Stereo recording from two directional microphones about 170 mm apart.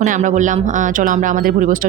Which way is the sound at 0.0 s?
45° right (ahead or behind).